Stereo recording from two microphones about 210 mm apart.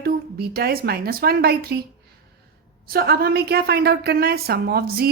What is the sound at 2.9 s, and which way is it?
Speech, 45° right (ahead or behind).